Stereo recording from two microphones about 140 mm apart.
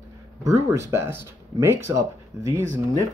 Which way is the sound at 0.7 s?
20° right (ahead or behind).